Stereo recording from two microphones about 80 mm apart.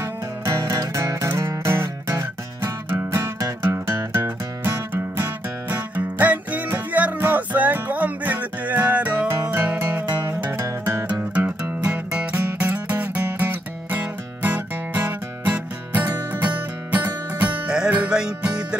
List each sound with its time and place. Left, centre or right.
0.0 s music: right
4.9 s music: right
11.8 s music: centre